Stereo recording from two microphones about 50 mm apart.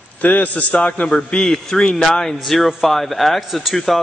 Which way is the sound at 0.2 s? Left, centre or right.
Left.